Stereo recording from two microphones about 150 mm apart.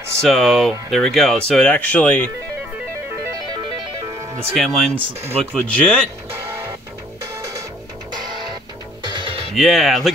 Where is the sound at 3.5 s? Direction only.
25° right (ahead or behind).